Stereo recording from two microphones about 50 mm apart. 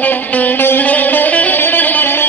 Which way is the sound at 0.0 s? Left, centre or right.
Left.